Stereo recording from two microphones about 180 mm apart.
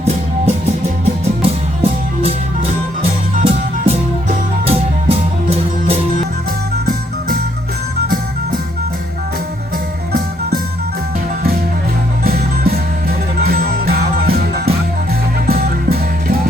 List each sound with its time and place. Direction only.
0.0 s music: 35° right (ahead or behind)
10.1 s music: 55° right (ahead or behind)
12.2 s music: 55° right (ahead or behind)